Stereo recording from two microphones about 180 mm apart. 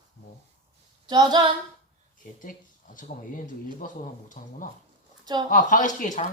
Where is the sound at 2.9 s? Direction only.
45° left (ahead or behind).